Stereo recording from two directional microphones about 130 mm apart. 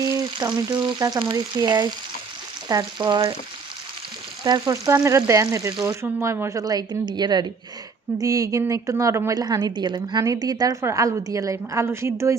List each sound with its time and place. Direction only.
0.0 s frying: 30° right (ahead or behind)
4.4 s a woman's voice: 30° right (ahead or behind)